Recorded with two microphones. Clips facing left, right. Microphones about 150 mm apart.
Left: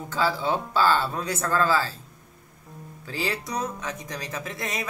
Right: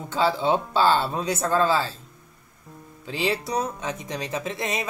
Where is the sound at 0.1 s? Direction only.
25° right (ahead or behind).